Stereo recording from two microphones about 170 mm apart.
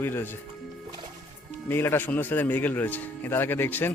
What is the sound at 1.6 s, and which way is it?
A man's voice, 15° left (ahead or behind).